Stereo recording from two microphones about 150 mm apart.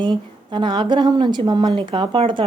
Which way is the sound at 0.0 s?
30° right (ahead or behind).